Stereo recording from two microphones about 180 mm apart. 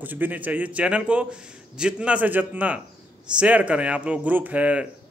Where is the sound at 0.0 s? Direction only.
10° right (ahead or behind).